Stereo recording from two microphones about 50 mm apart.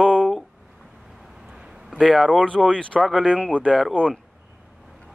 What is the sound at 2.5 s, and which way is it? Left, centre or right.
Speech, centre.